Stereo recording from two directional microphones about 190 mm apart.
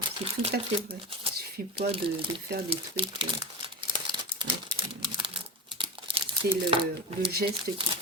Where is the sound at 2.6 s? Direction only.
30° right (ahead or behind).